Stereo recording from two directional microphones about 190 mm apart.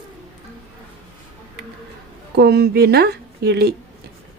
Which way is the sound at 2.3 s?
55° right (ahead or behind).